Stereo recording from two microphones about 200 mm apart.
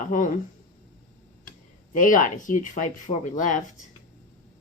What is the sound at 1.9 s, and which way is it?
Speech, 40° left (ahead or behind).